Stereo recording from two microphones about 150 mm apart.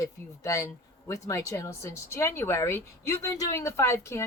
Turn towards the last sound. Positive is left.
turn(degrees=20)  # may be behind; listen again after turning